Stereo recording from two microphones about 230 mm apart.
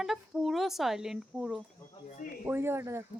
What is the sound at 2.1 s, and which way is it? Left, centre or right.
Speech, left.